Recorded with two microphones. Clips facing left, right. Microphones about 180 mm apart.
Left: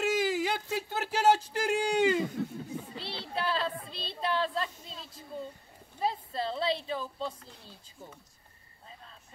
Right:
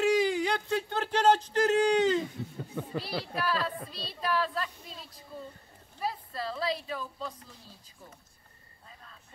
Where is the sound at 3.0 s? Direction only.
25° left (ahead or behind).